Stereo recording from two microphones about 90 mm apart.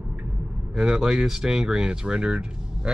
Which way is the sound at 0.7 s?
5° right (ahead or behind).